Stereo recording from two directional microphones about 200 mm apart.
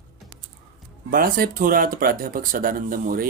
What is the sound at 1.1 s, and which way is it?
Speech, 45° right (ahead or behind).